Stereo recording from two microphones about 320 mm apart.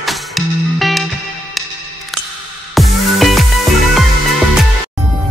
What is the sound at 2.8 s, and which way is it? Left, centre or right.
Music, centre.